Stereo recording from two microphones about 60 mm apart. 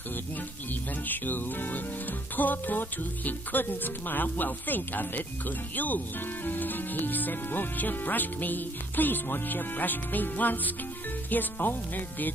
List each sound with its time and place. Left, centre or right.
1.0 s speech: left